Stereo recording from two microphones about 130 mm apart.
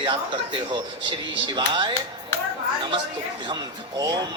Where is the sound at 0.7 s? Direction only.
35° right (ahead or behind).